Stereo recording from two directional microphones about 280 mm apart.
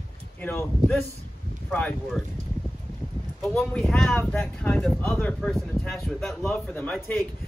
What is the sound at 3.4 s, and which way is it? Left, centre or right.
A man's voice, centre.